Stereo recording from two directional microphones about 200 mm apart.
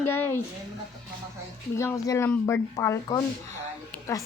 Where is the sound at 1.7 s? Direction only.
15° left (ahead or behind).